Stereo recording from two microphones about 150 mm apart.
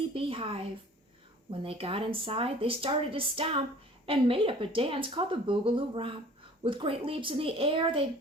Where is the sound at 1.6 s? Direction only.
40° right (ahead or behind).